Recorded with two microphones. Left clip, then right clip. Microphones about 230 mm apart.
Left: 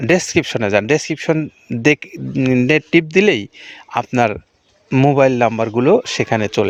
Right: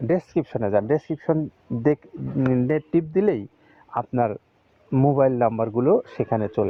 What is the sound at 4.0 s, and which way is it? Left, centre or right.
Speech, left.